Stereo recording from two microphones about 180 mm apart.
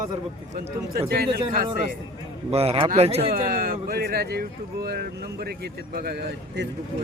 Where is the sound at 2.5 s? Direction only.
35° right (ahead or behind).